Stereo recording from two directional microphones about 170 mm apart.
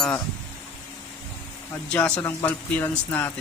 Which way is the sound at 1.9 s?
10° left (ahead or behind).